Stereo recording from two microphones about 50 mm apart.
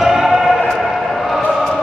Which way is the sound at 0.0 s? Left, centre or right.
Centre.